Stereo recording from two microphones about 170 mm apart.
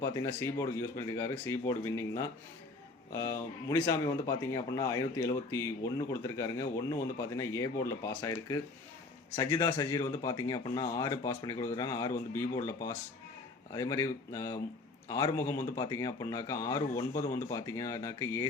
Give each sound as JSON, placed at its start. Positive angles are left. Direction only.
{"t": 0.0, "sound": "speech", "side_deg": 20}